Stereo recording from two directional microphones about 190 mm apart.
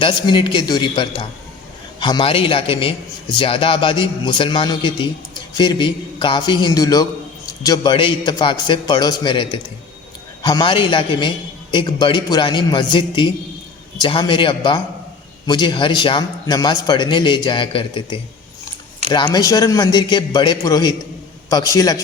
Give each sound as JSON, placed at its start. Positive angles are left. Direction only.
{"t": 0.0, "sound": "a man's voice", "side_deg": 25}